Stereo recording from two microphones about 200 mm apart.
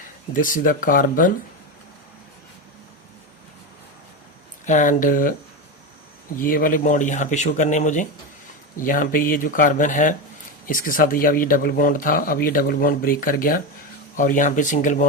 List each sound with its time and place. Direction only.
0.3 s speech: 45° left (ahead or behind)
4.6 s speech: 40° left (ahead or behind)
6.4 s speech: 45° left (ahead or behind)